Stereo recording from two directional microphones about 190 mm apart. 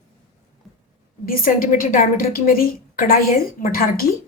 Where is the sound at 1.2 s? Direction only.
50° left (ahead or behind).